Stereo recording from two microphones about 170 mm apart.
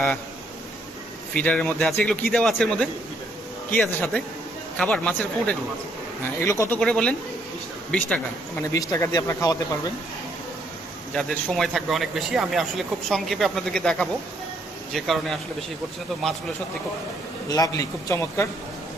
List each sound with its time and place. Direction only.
1.4 s a man's voice: 10° left (ahead or behind)
6.7 s a man's voice: 5° left (ahead or behind)
8.6 s speech: 20° left (ahead or behind)
11.1 s a man's voice: 5° left (ahead or behind)
17.5 s a man's voice: 20° left (ahead or behind)